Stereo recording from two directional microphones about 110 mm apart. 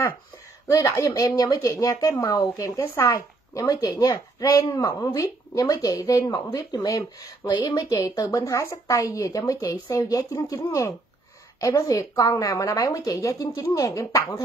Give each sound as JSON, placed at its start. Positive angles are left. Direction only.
{"t": 0.7, "sound": "speech", "side_deg": 30}